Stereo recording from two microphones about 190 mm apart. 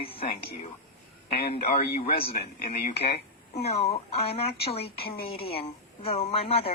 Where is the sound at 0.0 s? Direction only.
30° left (ahead or behind).